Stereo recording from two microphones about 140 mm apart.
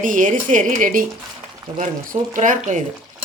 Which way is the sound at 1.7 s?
65° right (ahead or behind).